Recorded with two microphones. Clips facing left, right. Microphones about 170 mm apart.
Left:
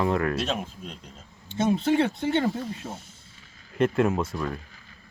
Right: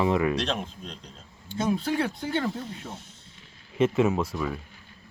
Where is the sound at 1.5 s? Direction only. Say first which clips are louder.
Left 4 dB; 25° left (ahead or behind).